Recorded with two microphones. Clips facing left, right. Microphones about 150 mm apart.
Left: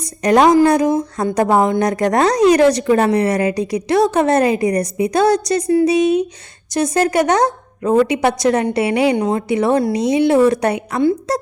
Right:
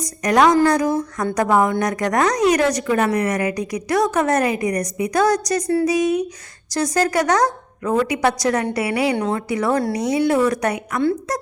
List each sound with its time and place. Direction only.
0.0 s a woman's voice: 30° left (ahead or behind)